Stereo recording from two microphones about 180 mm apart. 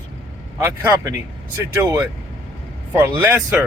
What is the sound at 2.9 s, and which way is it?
Speech, 10° right (ahead or behind).